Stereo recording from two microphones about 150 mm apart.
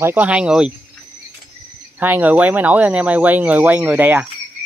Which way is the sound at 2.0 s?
10° right (ahead or behind).